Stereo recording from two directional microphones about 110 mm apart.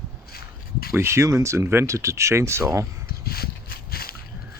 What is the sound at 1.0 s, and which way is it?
Speech, 25° right (ahead or behind).